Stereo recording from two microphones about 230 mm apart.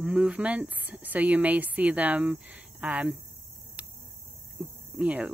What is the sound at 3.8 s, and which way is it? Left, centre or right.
Cricket, centre.